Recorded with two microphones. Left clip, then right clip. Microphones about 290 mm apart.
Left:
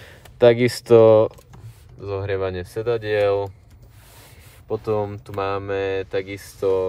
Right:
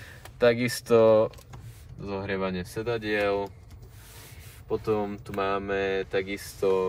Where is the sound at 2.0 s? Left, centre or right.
Left.